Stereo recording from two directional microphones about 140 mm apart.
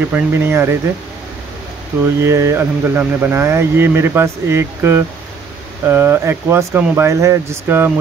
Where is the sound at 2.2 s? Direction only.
20° right (ahead or behind).